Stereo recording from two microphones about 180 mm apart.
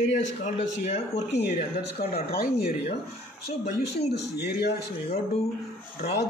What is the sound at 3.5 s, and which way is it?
Speech, 35° left (ahead or behind).